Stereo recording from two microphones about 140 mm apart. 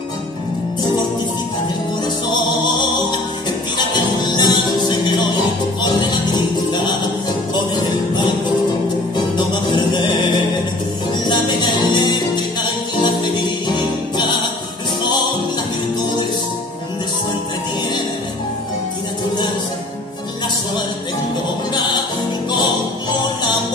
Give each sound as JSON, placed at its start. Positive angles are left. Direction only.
{"t": 2.3, "sound": "music", "side_deg": 35}
{"t": 9.8, "sound": "music", "side_deg": 30}
{"t": 11.2, "sound": "music", "side_deg": 30}